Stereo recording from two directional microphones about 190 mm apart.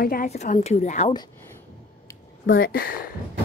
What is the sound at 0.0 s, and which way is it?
Speech, 50° left (ahead or behind).